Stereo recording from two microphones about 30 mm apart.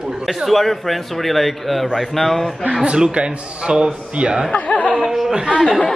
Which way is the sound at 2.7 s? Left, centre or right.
Right.